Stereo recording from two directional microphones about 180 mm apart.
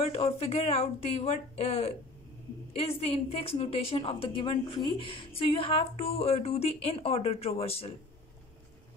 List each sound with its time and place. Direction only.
0.0 s a woman's voice: 35° left (ahead or behind)